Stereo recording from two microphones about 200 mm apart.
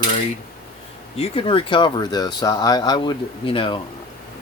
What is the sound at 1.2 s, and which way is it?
Speech, 25° left (ahead or behind).